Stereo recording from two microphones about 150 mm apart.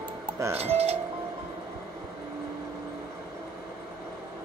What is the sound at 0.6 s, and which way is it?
Speech, 45° right (ahead or behind).